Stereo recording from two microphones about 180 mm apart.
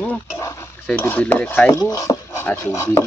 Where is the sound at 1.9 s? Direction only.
20° left (ahead or behind).